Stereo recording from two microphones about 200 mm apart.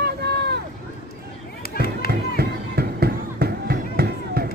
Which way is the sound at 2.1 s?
50° right (ahead or behind).